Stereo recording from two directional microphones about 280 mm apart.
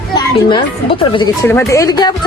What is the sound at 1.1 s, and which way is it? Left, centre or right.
A woman's voice, centre.